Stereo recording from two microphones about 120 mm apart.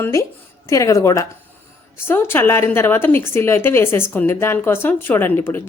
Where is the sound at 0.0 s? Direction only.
25° left (ahead or behind).